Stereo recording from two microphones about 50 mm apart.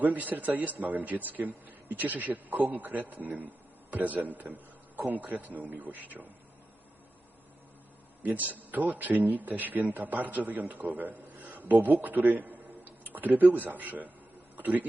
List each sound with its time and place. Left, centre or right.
0.0 s a man's voice: right
8.2 s a man's voice: right
14.5 s a sound: right